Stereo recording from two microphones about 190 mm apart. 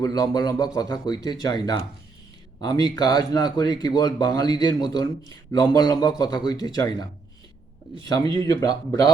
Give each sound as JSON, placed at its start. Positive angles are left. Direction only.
{"t": 0.0, "sound": "speech", "side_deg": 20}